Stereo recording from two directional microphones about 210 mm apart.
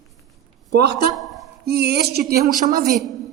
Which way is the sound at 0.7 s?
50° right (ahead or behind).